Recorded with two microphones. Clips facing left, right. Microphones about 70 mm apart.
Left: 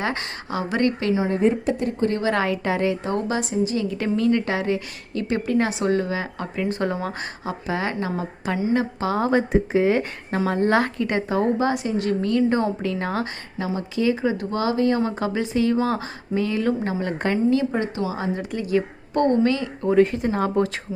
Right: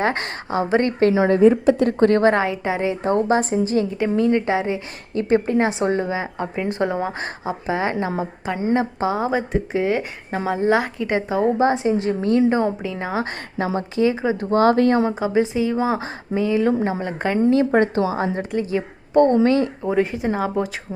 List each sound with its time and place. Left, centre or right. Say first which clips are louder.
0.0 s a woman's voice: right 5 dB; right
1.8 s a woman's voice: right 7 dB; right
2.3 s speech: right 1 dB; centre
3.0 s a woman's voice: right 6 dB; right
4.2 s speech: right 3 dB; right
9.1 s speech: left 3 dB; centre
9.5 s speech: left 2 dB; centre
13.7 s speech: right 2 dB; right
14.5 s speech: right 8 dB; right
15.0 s speech: right 5 dB; centre
17.7 s a woman's voice: right 7 dB; right
19.5 s a woman's voice: right 5 dB; right
19.8 s speech: left 2 dB; centre